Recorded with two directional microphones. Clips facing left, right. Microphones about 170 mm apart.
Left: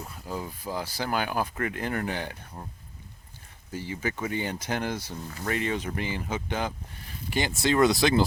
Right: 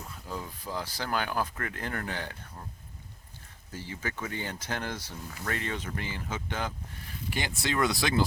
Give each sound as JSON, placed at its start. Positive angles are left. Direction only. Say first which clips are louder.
{"t": 0.3, "sound": "speech", "louder": "left 4 dB", "side_deg": 10}
{"t": 3.7, "sound": "speech", "louder": "left 6 dB", "side_deg": 15}
{"t": 7.3, "sound": "speech", "louder": "left 7 dB", "side_deg": 30}